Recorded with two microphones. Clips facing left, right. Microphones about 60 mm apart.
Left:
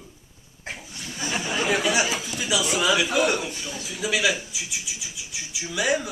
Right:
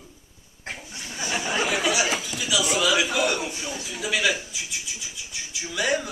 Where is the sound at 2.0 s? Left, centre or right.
Centre.